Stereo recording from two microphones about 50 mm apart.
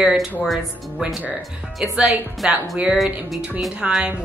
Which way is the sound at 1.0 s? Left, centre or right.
Right.